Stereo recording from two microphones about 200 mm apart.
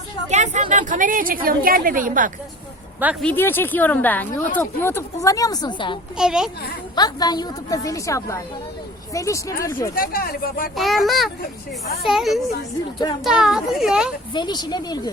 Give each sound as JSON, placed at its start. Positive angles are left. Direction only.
{"t": 0.3, "sound": "a woman's voice", "side_deg": -35}
{"t": 3.0, "sound": "speech", "side_deg": -5}
{"t": 3.2, "sound": "speech", "side_deg": 10}
{"t": 6.1, "sound": "a child's voice", "side_deg": -5}
{"t": 6.9, "sound": "speech", "side_deg": 20}
{"t": 9.9, "sound": "speech", "side_deg": 45}
{"t": 10.8, "sound": "a child's voice", "side_deg": 0}
{"t": 14.3, "sound": "speech", "side_deg": 20}